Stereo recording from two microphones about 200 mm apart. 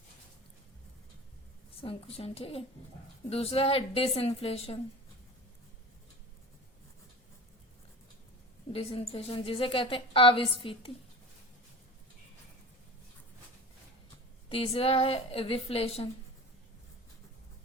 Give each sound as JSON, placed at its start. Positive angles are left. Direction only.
{"t": 1.8, "sound": "a woman's voice", "side_deg": 30}
{"t": 8.7, "sound": "a woman's voice", "side_deg": 30}
{"t": 14.5, "sound": "a woman's voice", "side_deg": 30}